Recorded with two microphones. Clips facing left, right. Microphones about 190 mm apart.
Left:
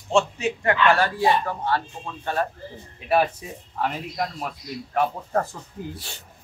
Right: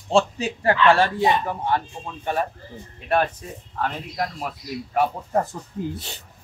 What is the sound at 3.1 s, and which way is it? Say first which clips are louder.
Speech: left 1 dB; 10° left (ahead or behind).